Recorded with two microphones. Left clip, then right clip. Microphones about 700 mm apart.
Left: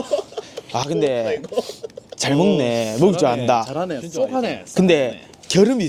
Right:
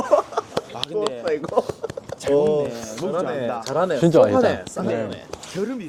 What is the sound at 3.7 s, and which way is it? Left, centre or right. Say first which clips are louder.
Speech: right 4 dB; left.